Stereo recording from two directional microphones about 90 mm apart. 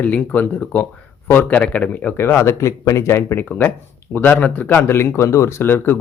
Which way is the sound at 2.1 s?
25° left (ahead or behind).